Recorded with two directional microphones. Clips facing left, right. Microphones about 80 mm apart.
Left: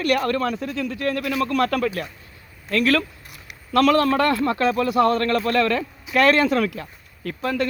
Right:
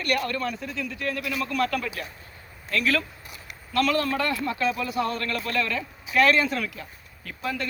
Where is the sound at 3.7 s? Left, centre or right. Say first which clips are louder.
Left 7 dB; left.